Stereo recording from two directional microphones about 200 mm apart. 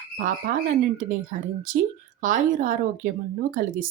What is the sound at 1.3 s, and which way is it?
Speech, 40° right (ahead or behind).